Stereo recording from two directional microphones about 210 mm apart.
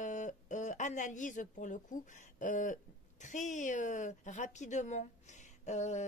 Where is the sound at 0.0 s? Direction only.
35° left (ahead or behind).